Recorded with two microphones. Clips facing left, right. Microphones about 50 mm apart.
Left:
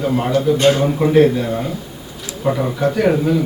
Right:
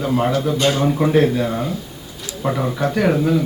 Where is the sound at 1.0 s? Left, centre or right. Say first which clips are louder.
Left 3 dB; centre.